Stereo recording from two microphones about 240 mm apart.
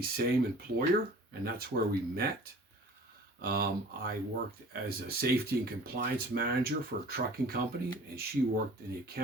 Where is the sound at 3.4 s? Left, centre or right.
Right.